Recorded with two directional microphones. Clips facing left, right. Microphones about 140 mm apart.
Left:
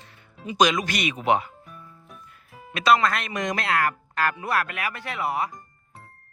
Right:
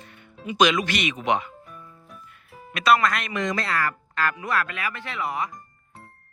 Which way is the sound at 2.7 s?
25° left (ahead or behind).